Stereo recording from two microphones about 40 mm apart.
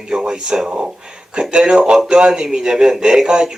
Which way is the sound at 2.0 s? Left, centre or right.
Right.